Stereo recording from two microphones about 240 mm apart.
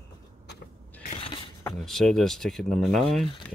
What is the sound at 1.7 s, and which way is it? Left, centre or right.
Speech, centre.